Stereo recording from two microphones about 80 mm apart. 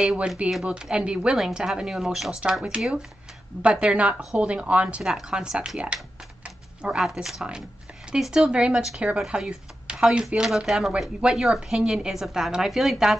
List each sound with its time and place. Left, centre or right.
0.0 s speech: centre
3.6 s speech: centre
6.4 s a sound: centre
7.0 s a woman's voice: centre